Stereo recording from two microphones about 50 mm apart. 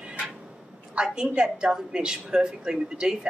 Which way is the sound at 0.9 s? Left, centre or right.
Centre.